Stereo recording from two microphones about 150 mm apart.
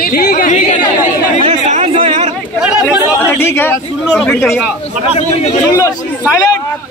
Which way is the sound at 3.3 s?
15° left (ahead or behind).